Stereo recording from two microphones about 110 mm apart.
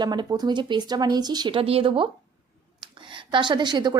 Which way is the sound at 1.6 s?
60° right (ahead or behind).